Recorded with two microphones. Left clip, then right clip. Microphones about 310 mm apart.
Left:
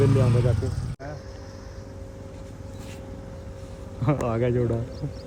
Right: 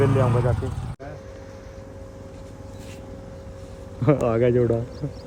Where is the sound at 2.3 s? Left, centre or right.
Centre.